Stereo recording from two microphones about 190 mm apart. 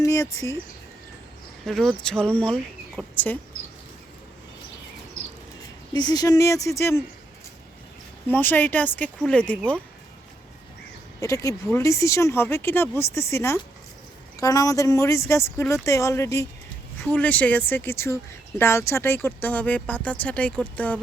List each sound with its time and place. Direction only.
0.0 s speech: 15° left (ahead or behind)
1.6 s speech: centre (ahead or behind)
5.9 s speech: 20° left (ahead or behind)
8.3 s speech: 10° left (ahead or behind)
11.2 s speech: 15° left (ahead or behind)